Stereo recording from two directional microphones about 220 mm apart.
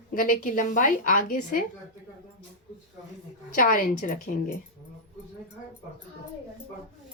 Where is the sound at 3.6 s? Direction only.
40° left (ahead or behind).